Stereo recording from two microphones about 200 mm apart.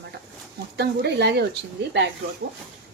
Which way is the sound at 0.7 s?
55° right (ahead or behind).